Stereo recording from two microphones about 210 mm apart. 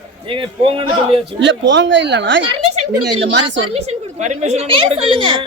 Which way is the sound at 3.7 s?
30° right (ahead or behind).